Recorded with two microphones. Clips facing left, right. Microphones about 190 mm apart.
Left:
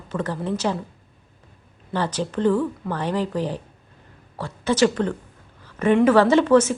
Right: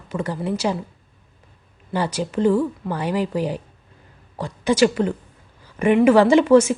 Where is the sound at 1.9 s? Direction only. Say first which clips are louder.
Right 2 dB; 10° right (ahead or behind).